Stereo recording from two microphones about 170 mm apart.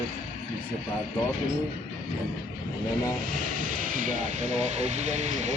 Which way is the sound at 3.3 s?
50° right (ahead or behind).